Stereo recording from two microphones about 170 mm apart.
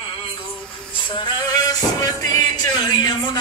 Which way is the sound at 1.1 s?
25° left (ahead or behind).